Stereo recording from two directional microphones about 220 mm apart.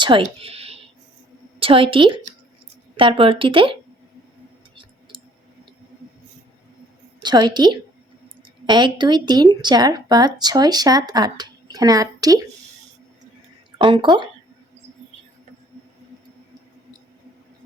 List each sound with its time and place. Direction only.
0.0 s speech: 25° right (ahead or behind)
7.2 s speech: 20° right (ahead or behind)
13.7 s speech: 20° right (ahead or behind)